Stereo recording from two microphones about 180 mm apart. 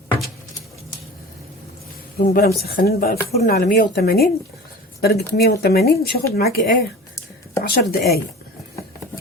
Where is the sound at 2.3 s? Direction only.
60° left (ahead or behind).